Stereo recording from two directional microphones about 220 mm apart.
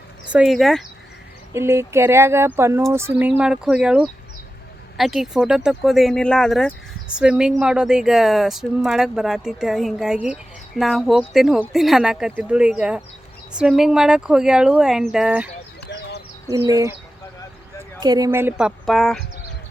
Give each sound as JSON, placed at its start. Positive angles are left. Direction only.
{"t": 0.3, "sound": "speech", "side_deg": -5}
{"t": 1.5, "sound": "a woman's voice", "side_deg": -10}
{"t": 15.9, "sound": "a sound", "side_deg": 50}
{"t": 16.6, "sound": "a woman's voice", "side_deg": -15}
{"t": 18.0, "sound": "a woman's voice", "side_deg": -15}